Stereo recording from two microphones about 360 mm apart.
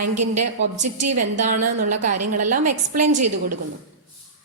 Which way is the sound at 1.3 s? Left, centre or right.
Right.